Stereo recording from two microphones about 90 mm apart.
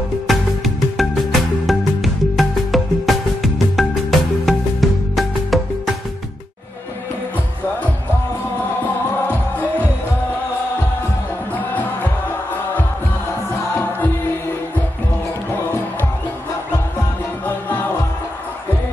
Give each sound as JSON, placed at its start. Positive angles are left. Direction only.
{"t": 0.3, "sound": "music", "side_deg": 0}
{"t": 13.7, "sound": "music", "side_deg": 20}